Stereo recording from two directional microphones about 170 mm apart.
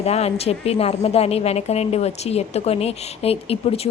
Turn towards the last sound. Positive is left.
turn(degrees=35)  # may be behind; listen again after turning